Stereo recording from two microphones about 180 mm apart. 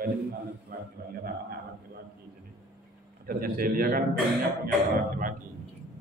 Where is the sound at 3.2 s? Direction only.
55° right (ahead or behind).